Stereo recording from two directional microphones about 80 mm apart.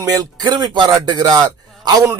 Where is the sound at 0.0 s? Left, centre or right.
Right.